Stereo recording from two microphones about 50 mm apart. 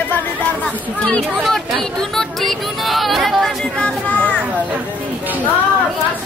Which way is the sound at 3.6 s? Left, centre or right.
Left.